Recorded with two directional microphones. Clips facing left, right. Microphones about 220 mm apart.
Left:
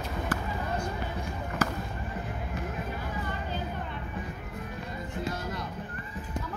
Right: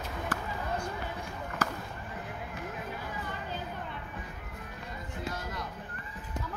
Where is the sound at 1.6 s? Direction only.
5° left (ahead or behind).